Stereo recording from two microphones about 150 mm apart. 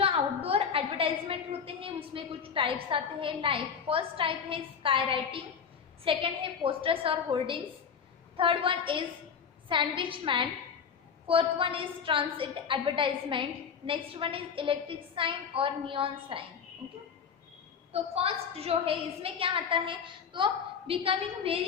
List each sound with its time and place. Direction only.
0.0 s a woman's voice: 40° right (ahead or behind)
17.9 s a woman's voice: 40° right (ahead or behind)